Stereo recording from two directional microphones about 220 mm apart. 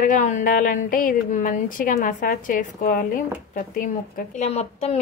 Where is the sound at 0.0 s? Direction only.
35° left (ahead or behind).